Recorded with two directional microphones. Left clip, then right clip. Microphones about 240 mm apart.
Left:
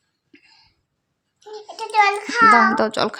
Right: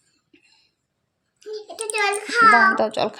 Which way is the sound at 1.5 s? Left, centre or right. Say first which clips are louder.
Left 5 dB; centre.